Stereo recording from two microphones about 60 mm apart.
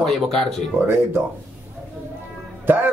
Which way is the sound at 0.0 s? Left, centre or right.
Centre.